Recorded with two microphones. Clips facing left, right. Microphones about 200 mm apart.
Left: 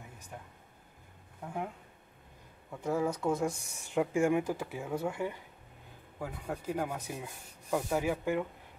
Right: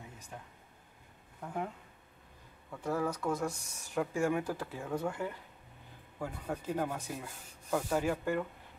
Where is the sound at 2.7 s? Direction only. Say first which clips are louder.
Left 2 dB; 15° left (ahead or behind).